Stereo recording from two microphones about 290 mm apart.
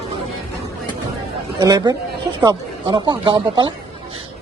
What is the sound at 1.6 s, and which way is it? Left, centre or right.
A man's voice, centre.